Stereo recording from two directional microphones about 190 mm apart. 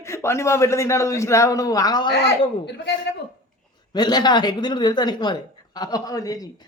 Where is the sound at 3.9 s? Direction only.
20° left (ahead or behind).